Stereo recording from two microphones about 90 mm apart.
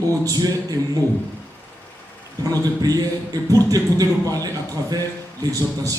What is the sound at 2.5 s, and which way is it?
A man's voice, 45° right (ahead or behind).